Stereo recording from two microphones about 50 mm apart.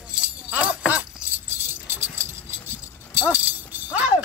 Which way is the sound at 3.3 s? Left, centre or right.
Right.